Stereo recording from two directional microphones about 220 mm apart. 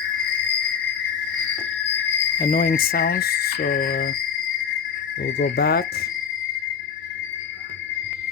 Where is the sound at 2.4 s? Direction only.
35° left (ahead or behind).